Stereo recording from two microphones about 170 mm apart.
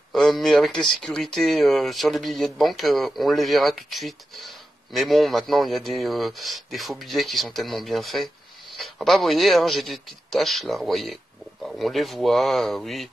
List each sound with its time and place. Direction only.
0.1 s speech: centre (ahead or behind)